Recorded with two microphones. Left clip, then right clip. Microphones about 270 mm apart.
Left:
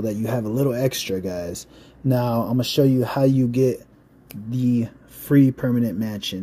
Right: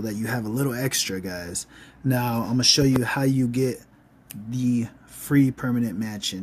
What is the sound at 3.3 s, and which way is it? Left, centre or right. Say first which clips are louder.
Speech: left 5 dB; centre.